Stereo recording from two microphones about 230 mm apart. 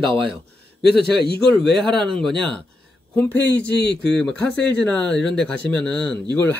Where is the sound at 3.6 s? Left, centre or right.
Left.